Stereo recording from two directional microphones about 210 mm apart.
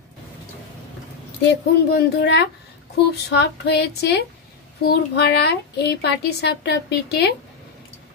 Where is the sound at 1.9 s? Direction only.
55° left (ahead or behind).